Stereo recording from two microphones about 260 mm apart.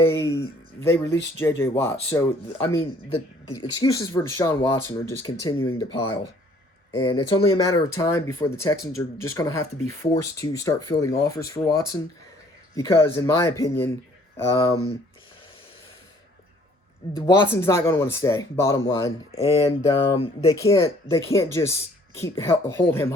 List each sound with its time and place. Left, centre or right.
0.0 s speech: centre
17.2 s speech: centre
19.3 s speech: left